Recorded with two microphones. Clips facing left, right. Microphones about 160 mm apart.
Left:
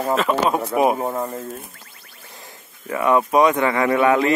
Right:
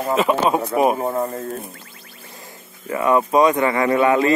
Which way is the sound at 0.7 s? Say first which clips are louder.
Right 1 dB; 15° left (ahead or behind).